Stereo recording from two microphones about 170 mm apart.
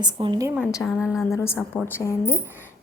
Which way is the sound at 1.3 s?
15° left (ahead or behind).